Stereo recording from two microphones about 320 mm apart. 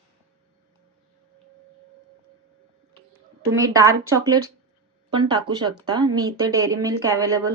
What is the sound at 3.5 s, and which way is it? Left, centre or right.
Speech, centre.